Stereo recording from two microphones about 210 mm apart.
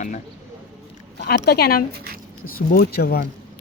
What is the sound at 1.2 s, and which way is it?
A woman's voice, 50° left (ahead or behind).